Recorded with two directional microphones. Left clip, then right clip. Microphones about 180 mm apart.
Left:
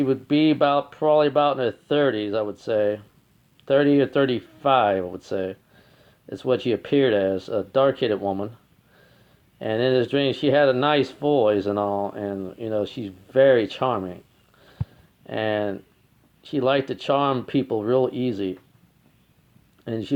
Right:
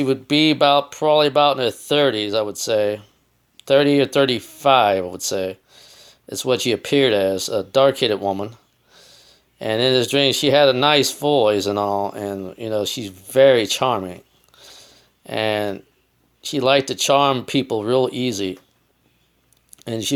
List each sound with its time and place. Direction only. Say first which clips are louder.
0.0 s speech: right 3 dB; 15° right (ahead or behind)
14.5 s a sound: right 9 dB; 20° right (ahead or behind)
15.3 s speech: right 3 dB; 20° right (ahead or behind)
19.8 s speech: right 4 dB; 15° right (ahead or behind)